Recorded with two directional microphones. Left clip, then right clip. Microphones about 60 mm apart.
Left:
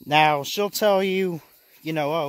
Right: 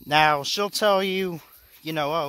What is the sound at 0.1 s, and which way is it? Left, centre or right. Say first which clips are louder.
Speech: left 1 dB; left.